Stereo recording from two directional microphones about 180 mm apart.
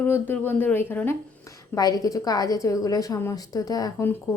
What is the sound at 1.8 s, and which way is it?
A woman's voice, 20° left (ahead or behind).